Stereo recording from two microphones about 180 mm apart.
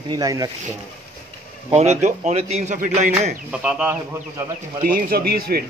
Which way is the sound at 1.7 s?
40° right (ahead or behind).